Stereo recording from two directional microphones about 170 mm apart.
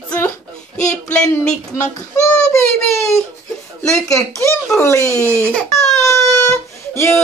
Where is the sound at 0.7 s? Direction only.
5° left (ahead or behind).